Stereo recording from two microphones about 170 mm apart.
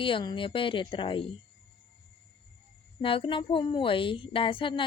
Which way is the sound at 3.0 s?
30° left (ahead or behind).